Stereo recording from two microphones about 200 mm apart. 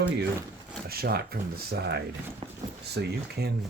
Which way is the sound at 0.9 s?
50° right (ahead or behind).